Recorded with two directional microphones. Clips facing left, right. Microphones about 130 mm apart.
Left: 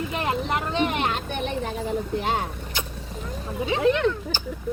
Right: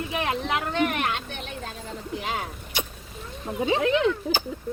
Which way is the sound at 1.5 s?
65° left (ahead or behind).